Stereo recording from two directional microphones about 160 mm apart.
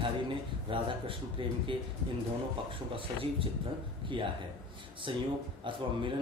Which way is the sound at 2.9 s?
35° right (ahead or behind).